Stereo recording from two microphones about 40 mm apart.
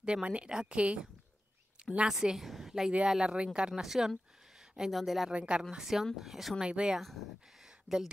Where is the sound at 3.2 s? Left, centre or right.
Right.